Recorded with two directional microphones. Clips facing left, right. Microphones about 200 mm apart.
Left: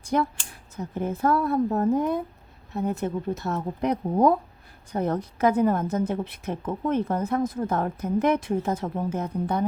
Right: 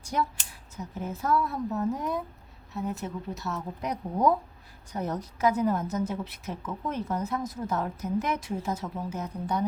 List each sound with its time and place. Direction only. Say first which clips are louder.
0.0 s a woman's voice: left 5 dB; 55° left (ahead or behind)